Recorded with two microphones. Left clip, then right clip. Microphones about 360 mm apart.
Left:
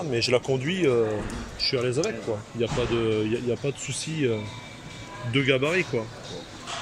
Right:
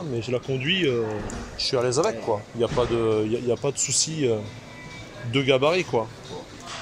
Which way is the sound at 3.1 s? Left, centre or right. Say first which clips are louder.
Right 3 dB; right.